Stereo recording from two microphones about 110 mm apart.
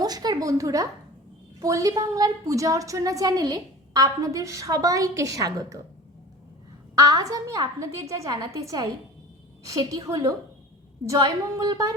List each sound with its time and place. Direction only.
0.0 s a woman's voice: 35° right (ahead or behind)
6.9 s a woman's voice: 30° right (ahead or behind)
11.5 s a woman's voice: 35° right (ahead or behind)